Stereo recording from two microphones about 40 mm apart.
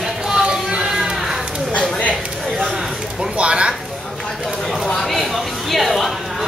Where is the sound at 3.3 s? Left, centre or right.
Right.